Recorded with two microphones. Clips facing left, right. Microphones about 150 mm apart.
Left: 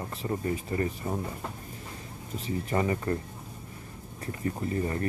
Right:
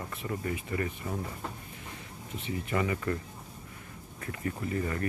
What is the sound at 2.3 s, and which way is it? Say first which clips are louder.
Speech: left 3 dB; 35° left (ahead or behind).